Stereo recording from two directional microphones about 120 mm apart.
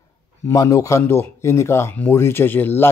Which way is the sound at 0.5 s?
25° left (ahead or behind).